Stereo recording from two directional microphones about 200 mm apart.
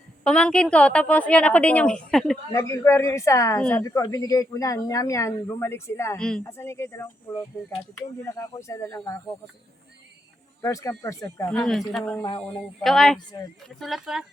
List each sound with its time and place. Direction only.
0.3 s a woman's voice: 5° left (ahead or behind)
2.5 s speech: 15° left (ahead or behind)
10.6 s speech: 15° left (ahead or behind)
11.5 s a woman's voice: centre (ahead or behind)
12.4 s a woman's voice: centre (ahead or behind)